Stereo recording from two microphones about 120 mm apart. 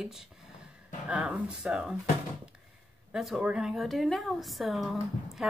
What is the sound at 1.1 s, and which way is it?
Speech, 10° right (ahead or behind).